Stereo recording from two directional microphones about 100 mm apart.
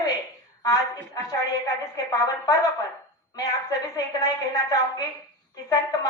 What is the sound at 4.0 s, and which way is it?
A woman's voice, 40° left (ahead or behind).